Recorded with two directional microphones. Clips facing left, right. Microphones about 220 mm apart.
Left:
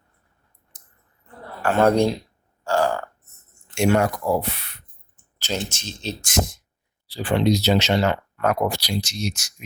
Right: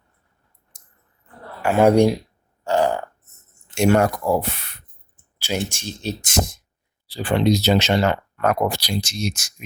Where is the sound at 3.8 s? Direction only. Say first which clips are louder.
Right 2 dB; 45° right (ahead or behind).